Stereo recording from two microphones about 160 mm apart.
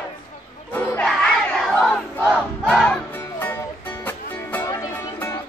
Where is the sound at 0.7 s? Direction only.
10° left (ahead or behind).